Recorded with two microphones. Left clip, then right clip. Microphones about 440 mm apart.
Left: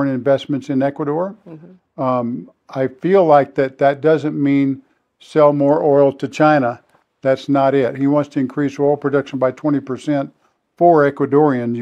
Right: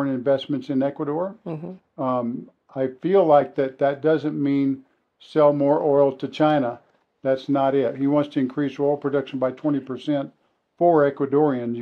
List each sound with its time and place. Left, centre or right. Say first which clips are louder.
0.0 s speech: left 5 dB; left